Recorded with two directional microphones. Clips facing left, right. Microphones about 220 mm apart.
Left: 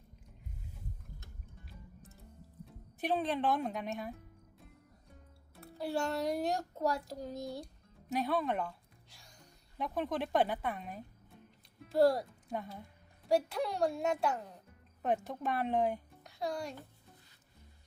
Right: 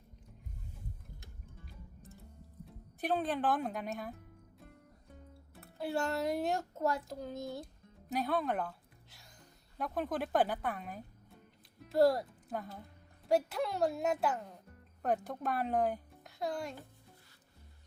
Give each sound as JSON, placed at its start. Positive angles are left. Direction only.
{"t": 1.6, "sound": "music", "side_deg": 0}
{"t": 2.6, "sound": "speech", "side_deg": 0}
{"t": 5.5, "sound": "a child's voice", "side_deg": 0}